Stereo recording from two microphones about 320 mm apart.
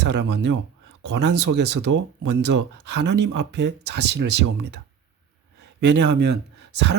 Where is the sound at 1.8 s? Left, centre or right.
Right.